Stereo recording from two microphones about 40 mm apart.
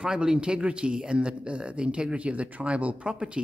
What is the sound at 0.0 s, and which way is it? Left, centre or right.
Speech, right.